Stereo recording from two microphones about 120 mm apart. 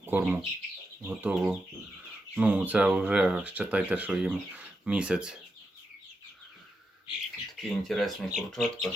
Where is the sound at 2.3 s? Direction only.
10° right (ahead or behind).